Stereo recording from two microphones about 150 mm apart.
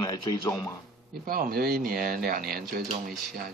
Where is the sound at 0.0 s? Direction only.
25° left (ahead or behind).